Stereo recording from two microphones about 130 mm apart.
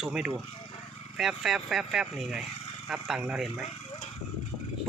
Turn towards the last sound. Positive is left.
turn(degrees=-5)  # may be behind; listen again after turning